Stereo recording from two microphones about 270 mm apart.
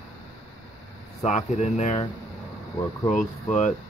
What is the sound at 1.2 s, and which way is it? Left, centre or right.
Speech, left.